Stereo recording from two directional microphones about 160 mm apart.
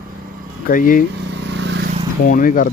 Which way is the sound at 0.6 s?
60° left (ahead or behind).